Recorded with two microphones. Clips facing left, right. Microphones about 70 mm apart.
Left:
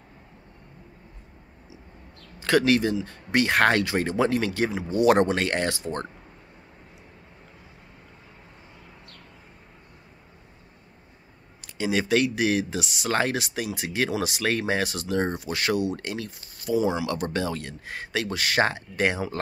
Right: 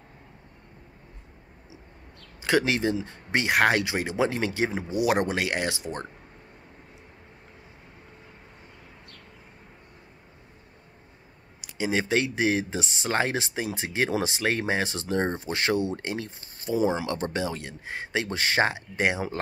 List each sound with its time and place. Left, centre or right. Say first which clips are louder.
2.4 s speech: left 3 dB; right
4.9 s speech: left 6 dB; centre
11.6 s speech: left 1 dB; right